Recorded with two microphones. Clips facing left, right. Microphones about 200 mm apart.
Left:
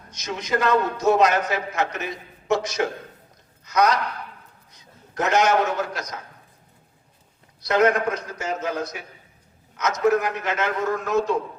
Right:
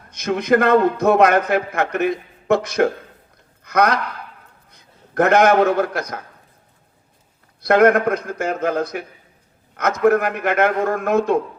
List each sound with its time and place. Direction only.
0.1 s a man's voice: 55° right (ahead or behind)
7.6 s a man's voice: 55° right (ahead or behind)